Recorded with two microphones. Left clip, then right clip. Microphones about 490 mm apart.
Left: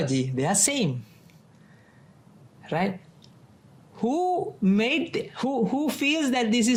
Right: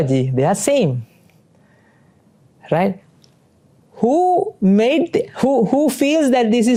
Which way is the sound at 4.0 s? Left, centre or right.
Right.